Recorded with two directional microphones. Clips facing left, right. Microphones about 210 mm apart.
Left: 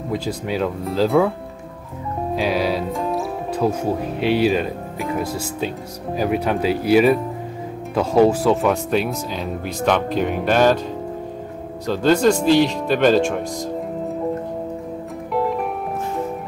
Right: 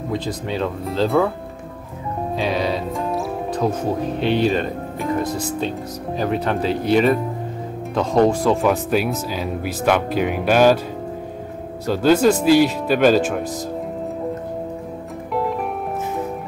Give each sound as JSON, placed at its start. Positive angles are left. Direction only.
{"t": 0.1, "sound": "speech", "side_deg": 5}
{"t": 2.3, "sound": "speech", "side_deg": 5}
{"t": 11.8, "sound": "speech", "side_deg": -5}
{"t": 15.3, "sound": "music", "side_deg": 0}